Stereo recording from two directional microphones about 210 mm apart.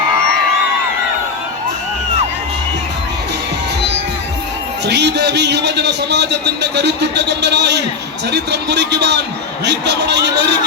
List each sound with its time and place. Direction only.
4.9 s a man's voice: 55° right (ahead or behind)